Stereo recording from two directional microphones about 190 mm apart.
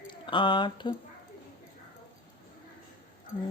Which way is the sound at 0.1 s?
25° left (ahead or behind).